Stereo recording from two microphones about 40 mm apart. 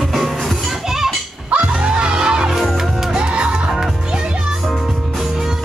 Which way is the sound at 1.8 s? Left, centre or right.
Right.